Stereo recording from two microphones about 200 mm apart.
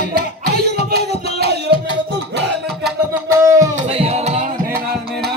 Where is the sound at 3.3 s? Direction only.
15° right (ahead or behind).